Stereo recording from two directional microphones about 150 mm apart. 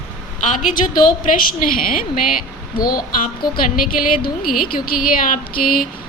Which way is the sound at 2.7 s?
75° left (ahead or behind).